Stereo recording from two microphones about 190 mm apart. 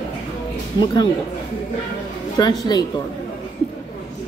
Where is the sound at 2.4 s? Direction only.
20° left (ahead or behind).